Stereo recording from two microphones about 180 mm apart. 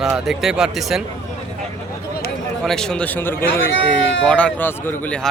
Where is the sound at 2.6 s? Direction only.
5° left (ahead or behind).